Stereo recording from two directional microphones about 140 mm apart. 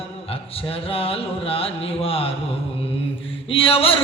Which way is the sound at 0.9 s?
40° left (ahead or behind).